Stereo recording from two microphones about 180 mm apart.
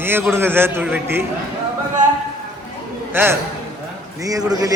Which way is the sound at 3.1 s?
10° right (ahead or behind).